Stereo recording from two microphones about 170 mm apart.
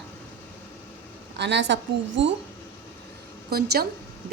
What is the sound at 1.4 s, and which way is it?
Speech, 90° right.